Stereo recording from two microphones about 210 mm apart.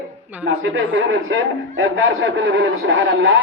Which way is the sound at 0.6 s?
65° right (ahead or behind).